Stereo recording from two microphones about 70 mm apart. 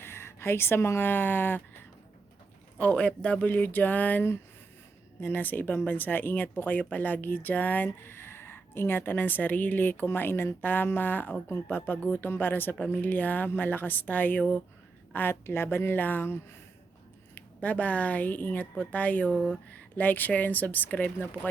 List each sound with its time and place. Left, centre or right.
0.0 s speech: left
2.7 s a woman's voice: left
17.3 s speech: left